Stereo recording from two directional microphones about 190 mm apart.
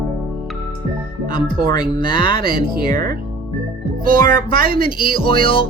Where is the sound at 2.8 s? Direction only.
50° right (ahead or behind).